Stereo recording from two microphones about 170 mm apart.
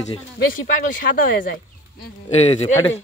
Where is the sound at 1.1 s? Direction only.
55° left (ahead or behind).